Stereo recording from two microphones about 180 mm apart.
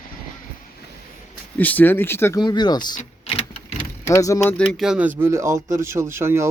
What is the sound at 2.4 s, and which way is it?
Speech, 25° left (ahead or behind).